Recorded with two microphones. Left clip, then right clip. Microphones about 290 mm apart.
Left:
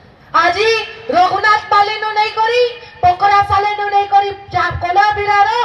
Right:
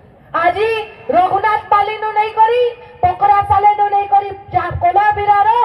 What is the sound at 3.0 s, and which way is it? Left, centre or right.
Music, left.